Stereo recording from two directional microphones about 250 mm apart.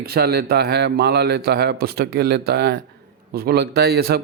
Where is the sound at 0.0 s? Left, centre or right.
Right.